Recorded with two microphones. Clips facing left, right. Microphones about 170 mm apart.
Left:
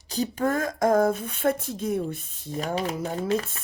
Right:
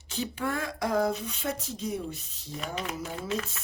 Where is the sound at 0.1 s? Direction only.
40° left (ahead or behind).